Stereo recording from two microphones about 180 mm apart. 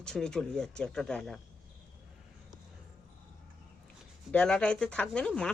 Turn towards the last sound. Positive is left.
turn(degrees=5)  # may be behind; listen again after turning